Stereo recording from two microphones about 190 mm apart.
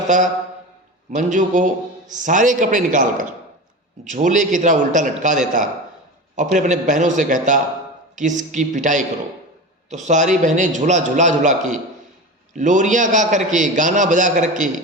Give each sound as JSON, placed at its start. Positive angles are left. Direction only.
{"t": 0.1, "sound": "a man's voice", "side_deg": -40}